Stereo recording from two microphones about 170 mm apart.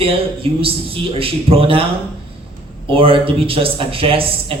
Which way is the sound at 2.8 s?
30° right (ahead or behind).